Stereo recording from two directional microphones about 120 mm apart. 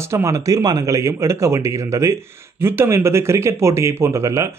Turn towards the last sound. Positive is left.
turn(degrees=-25)  # may be behind; listen again after turning